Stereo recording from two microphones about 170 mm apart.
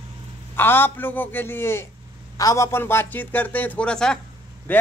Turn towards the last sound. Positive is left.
turn(degrees=10)  # may be behind; listen again after turning